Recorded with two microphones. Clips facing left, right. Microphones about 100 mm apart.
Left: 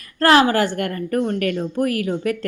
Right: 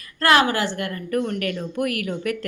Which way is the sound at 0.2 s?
35° left (ahead or behind).